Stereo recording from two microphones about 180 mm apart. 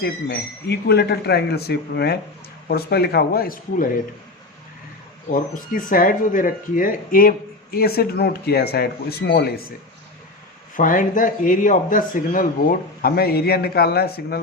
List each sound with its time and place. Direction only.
0.0 s speech: 65° left (ahead or behind)
5.3 s speech: 50° left (ahead or behind)
10.8 s speech: 45° left (ahead or behind)